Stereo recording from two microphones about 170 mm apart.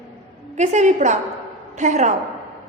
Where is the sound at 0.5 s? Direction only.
45° right (ahead or behind).